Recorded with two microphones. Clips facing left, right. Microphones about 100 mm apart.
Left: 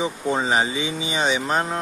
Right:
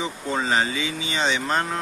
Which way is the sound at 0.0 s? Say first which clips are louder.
Left 3 dB; 20° left (ahead or behind).